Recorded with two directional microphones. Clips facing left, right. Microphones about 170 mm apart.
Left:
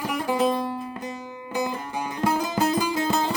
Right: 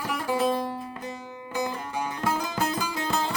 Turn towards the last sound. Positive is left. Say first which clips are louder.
# left 4 dB
turn(degrees=15)  # may be behind; listen again after turning